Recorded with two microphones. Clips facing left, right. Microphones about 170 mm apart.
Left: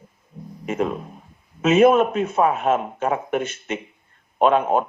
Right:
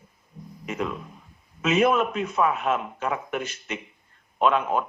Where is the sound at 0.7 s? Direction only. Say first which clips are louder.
Left 6 dB; 45° left (ahead or behind).